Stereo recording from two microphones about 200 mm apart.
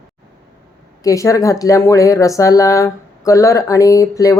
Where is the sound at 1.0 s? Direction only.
15° left (ahead or behind).